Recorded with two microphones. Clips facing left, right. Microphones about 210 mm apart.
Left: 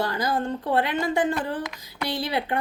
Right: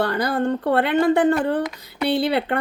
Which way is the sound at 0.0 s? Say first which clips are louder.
Right 5 dB; 65° right (ahead or behind).